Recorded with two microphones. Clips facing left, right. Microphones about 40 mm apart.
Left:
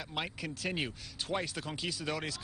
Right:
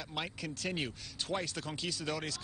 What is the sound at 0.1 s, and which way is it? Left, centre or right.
Speech, centre.